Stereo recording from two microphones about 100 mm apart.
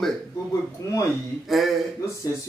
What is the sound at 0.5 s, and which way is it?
Speech, 35° left (ahead or behind).